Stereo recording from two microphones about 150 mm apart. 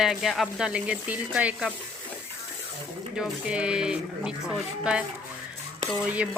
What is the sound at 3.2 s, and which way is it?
Speech, 5° right (ahead or behind).